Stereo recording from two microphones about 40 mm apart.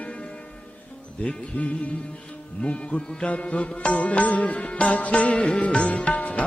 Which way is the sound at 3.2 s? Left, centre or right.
Left.